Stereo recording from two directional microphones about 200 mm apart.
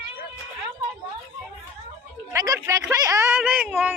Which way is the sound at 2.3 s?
15° right (ahead or behind).